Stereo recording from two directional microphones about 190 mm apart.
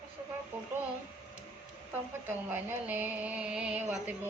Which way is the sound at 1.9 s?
10° right (ahead or behind).